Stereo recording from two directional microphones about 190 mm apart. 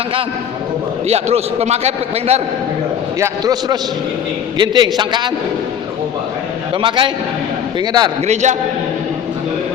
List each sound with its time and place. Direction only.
1.0 s a man's voice: 35° right (ahead or behind)
3.2 s a man's voice: 20° right (ahead or behind)
6.8 s a man's voice: 25° right (ahead or behind)
8.3 s a man's voice: 40° right (ahead or behind)